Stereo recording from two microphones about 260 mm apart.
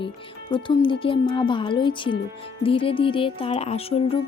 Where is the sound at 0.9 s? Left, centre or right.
Centre.